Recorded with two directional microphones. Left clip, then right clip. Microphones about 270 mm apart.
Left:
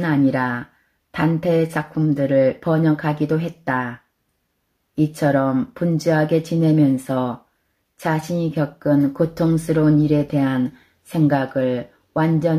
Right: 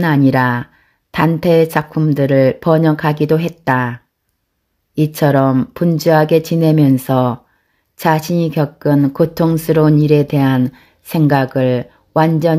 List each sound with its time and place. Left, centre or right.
0.0 s speech: right